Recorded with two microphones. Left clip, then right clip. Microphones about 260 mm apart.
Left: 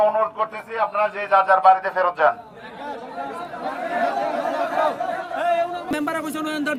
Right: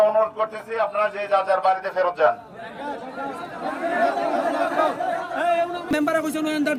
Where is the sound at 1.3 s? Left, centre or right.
Centre.